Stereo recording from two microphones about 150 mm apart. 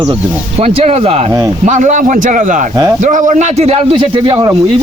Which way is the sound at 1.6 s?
55° right (ahead or behind).